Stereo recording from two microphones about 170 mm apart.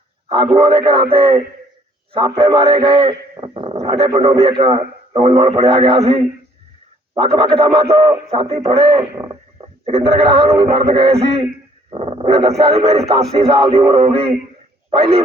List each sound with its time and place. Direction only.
0.5 s a man's voice: 35° right (ahead or behind)
6.0 s speech: 35° right (ahead or behind)
7.3 s speech: 30° right (ahead or behind)
9.0 s speech: 15° right (ahead or behind)
9.8 s speech: 35° right (ahead or behind)